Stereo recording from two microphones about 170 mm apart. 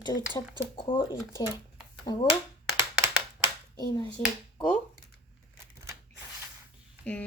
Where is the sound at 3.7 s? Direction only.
25° left (ahead or behind).